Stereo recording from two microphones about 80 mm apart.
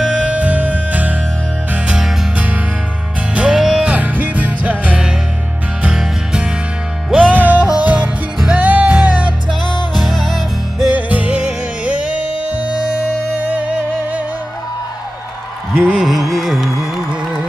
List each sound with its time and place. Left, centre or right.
0.0 s music: centre
2.3 s music: centre
10.0 s music: centre
10.9 s music: right
15.9 s carnatic music: centre